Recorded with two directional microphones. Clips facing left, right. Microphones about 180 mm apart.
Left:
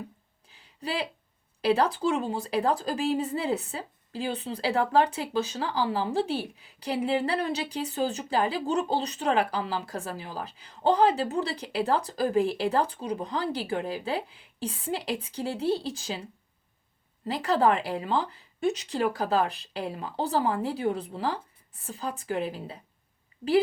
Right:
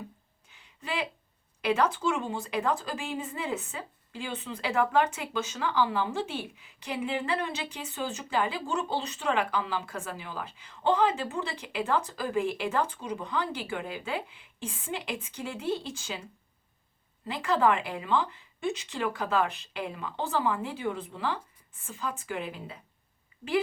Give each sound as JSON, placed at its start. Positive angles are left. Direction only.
{"t": 0.4, "sound": "a sound", "side_deg": 35}
{"t": 1.6, "sound": "a woman's voice", "side_deg": 35}
{"t": 17.2, "sound": "a woman's voice", "side_deg": 35}